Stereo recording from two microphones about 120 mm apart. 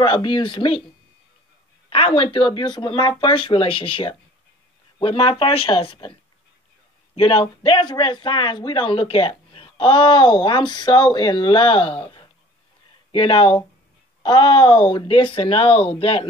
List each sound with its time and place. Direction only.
0.0 s speech: 40° left (ahead or behind)
1.9 s a sound: 50° left (ahead or behind)
2.3 s speech: 40° left (ahead or behind)
7.2 s speech: 50° left (ahead or behind)